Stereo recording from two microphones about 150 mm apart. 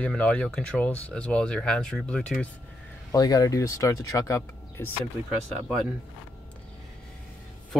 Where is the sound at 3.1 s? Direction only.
25° left (ahead or behind).